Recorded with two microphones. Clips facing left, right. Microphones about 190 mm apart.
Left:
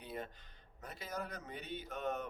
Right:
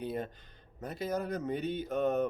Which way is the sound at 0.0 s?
45° right (ahead or behind).